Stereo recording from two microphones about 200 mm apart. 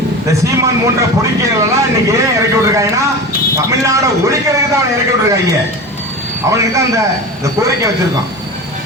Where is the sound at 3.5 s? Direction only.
15° right (ahead or behind).